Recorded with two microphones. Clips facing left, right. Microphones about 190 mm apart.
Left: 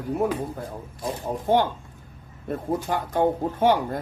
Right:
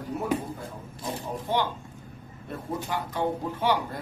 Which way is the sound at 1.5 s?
50° left (ahead or behind).